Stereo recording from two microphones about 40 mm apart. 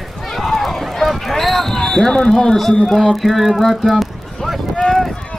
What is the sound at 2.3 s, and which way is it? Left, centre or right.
A man's voice, centre.